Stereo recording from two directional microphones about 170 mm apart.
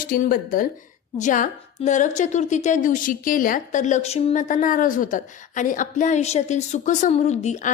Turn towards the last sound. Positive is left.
turn(degrees=45)  # may be behind; listen again after turning